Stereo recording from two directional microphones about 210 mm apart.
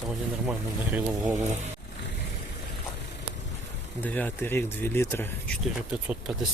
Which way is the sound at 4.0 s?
5° left (ahead or behind).